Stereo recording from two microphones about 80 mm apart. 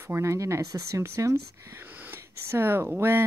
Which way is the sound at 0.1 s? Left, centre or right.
Right.